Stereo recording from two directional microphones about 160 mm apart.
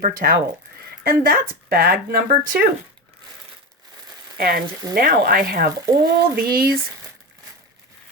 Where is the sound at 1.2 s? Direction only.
65° right (ahead or behind).